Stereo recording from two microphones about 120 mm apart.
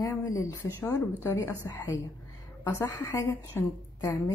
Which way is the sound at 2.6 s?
25° left (ahead or behind).